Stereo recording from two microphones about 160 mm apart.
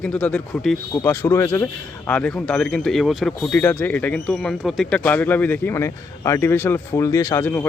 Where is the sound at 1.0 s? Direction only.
15° left (ahead or behind).